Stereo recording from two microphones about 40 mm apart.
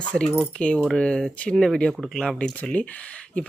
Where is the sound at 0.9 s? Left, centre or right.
Centre.